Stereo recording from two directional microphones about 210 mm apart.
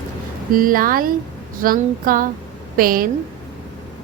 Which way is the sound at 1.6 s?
40° right (ahead or behind).